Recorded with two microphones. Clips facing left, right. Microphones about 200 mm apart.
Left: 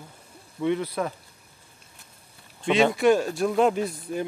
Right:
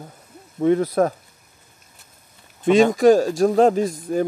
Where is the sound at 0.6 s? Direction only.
45° right (ahead or behind).